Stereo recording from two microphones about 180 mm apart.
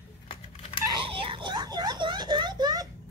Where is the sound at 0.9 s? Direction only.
30° right (ahead or behind).